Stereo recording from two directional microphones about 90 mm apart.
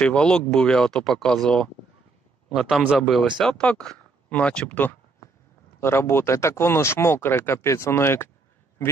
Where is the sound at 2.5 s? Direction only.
5° right (ahead or behind).